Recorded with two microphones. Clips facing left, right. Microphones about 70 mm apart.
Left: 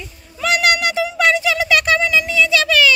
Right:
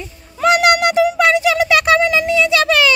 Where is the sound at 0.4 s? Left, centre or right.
Right.